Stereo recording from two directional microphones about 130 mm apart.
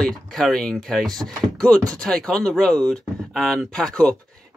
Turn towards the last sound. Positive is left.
turn(degrees=5)  # may be behind; listen again after turning